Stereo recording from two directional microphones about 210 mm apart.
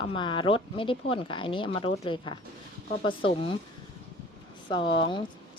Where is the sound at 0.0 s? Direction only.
25° left (ahead or behind).